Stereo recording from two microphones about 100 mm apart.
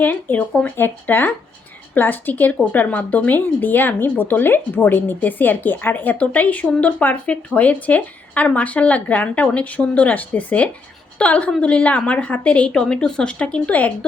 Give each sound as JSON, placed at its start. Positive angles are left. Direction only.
{"t": 0.0, "sound": "speech", "side_deg": 20}